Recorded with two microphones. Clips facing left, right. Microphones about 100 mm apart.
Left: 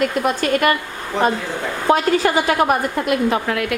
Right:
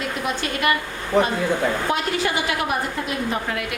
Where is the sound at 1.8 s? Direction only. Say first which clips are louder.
Left 7 dB; 40° left (ahead or behind).